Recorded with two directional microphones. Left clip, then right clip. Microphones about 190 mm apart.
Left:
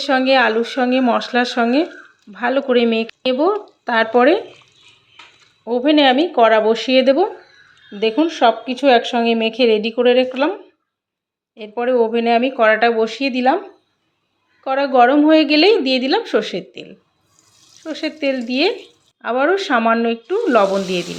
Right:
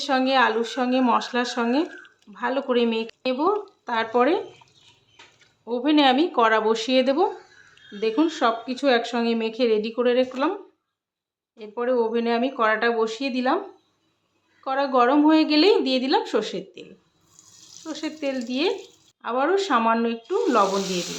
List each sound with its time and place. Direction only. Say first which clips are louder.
0.0 s speech: left 6 dB; 15° left (ahead or behind)
5.6 s speech: left 6 dB; 15° left (ahead or behind)
11.5 s speech: left 6 dB; 20° left (ahead or behind)
14.6 s speech: left 7 dB; 10° left (ahead or behind)
17.8 s speech: left 8 dB; 15° left (ahead or behind)